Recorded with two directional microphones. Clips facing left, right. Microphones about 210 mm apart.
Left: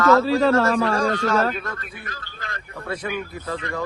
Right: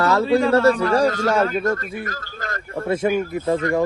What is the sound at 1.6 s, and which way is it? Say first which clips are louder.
Speech: right 11 dB; 45° right (ahead or behind).